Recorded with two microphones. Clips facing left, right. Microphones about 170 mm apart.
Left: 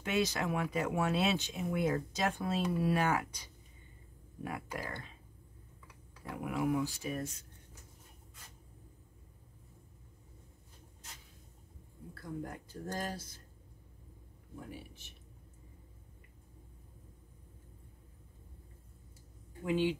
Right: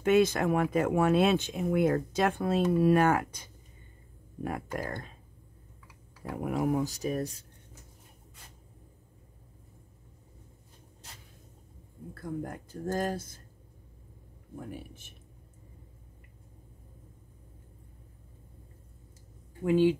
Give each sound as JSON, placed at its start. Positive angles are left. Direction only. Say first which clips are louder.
{"t": 0.0, "sound": "speech", "louder": "right 9 dB", "side_deg": -50}
{"t": 6.3, "sound": "speech", "louder": "right 4 dB", "side_deg": -40}
{"t": 12.1, "sound": "speech", "louder": "right 5 dB", "side_deg": -50}
{"t": 14.7, "sound": "speech", "louder": "right 6 dB", "side_deg": -50}
{"t": 19.6, "sound": "speech", "louder": "right 8 dB", "side_deg": -45}